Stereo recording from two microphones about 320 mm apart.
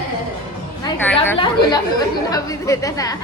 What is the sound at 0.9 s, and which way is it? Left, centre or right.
A woman's voice, centre.